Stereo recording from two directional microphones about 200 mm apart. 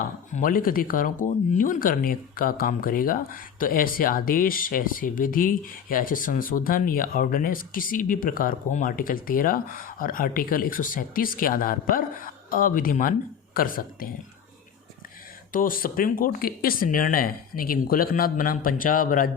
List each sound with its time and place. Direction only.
0.3 s speech: 45° left (ahead or behind)
15.5 s speech: 45° left (ahead or behind)